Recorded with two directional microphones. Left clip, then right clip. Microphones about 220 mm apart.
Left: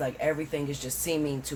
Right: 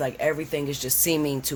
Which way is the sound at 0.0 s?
50° right (ahead or behind).